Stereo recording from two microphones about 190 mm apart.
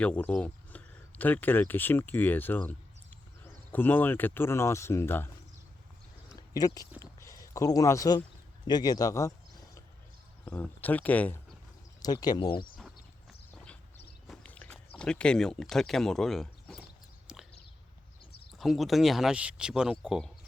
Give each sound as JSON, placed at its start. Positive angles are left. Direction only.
{"t": 0.0, "sound": "speech", "side_deg": 5}
{"t": 6.5, "sound": "speech", "side_deg": 20}
{"t": 7.0, "sound": "a sound", "side_deg": 15}
{"t": 8.6, "sound": "a man's voice", "side_deg": 20}
{"t": 10.4, "sound": "speech", "side_deg": 10}
{"t": 12.0, "sound": "a man's voice", "side_deg": 20}
{"t": 14.3, "sound": "walk", "side_deg": 5}
{"t": 14.9, "sound": "speech", "side_deg": 5}
{"t": 17.3, "sound": "a sound", "side_deg": -5}
{"t": 18.6, "sound": "speech", "side_deg": 0}